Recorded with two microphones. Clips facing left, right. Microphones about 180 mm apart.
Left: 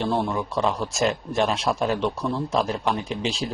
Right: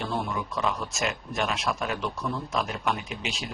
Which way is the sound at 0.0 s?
30° left (ahead or behind).